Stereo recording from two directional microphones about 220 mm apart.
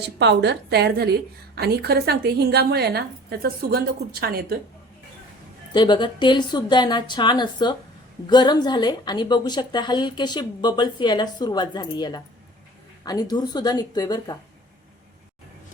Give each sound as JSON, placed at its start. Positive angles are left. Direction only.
{"t": 0.0, "sound": "a woman's voice", "side_deg": -50}
{"t": 5.7, "sound": "a woman's voice", "side_deg": 20}